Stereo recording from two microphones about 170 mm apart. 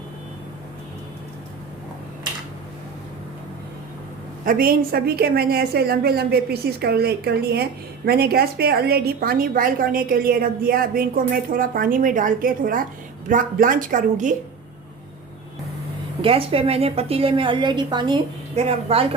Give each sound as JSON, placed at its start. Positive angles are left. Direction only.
{"t": 4.4, "sound": "a woman's voice", "side_deg": -60}
{"t": 16.2, "sound": "a woman's voice", "side_deg": -35}